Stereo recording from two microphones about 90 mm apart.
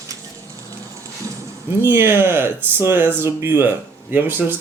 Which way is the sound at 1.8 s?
25° right (ahead or behind).